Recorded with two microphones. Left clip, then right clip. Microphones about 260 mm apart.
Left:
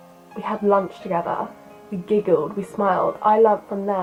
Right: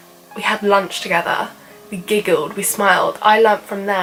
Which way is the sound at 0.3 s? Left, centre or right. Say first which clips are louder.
Right 4 dB; centre.